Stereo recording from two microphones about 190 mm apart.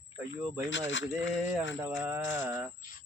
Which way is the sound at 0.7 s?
75° left (ahead or behind).